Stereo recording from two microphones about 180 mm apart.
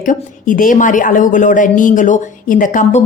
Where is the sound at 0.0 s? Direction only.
45° left (ahead or behind).